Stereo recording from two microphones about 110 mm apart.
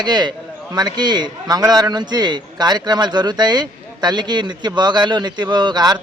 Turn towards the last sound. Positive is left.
turn(degrees=-40)  # may be behind; listen again after turning